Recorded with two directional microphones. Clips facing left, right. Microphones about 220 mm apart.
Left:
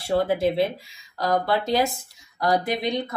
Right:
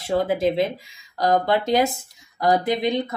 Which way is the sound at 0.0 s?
20° right (ahead or behind).